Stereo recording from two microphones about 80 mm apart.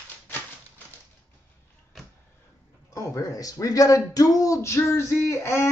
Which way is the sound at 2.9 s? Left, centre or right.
Left.